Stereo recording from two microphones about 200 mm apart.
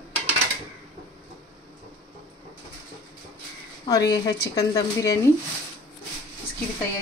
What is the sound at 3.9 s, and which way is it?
A woman's voice, 20° left (ahead or behind).